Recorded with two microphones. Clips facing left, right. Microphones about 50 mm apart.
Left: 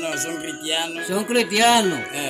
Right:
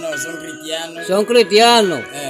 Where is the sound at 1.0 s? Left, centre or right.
Right.